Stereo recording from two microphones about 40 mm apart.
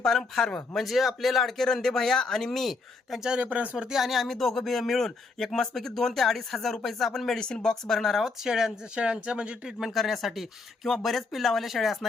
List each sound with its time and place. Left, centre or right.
0.0 s speech: centre
0.8 s speech: centre
3.4 s speech: right
3.9 s speech: centre
7.3 s speech: centre
8.4 s speech: centre
9.0 s speech: right
9.9 s speech: centre